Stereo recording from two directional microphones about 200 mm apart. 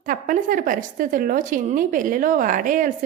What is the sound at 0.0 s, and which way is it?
A woman's voice, 45° right (ahead or behind).